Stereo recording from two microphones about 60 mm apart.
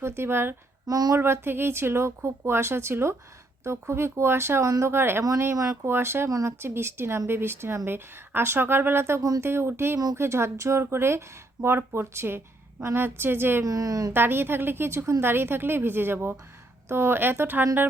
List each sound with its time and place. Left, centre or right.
0.0 s speech: right
0.9 s speech: right
1.1 s a woman's voice: right
13.7 s speech: right
14.1 s speech: right